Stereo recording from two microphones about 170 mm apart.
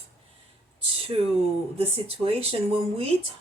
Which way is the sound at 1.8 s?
35° right (ahead or behind).